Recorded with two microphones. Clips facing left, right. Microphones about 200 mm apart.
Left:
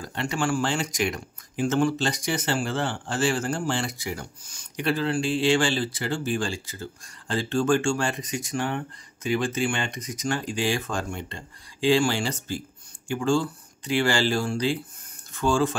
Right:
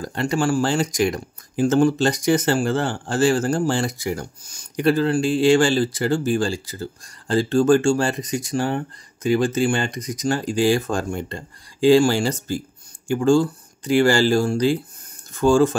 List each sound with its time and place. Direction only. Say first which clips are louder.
0.0 s speech: right 6 dB; 40° right (ahead or behind)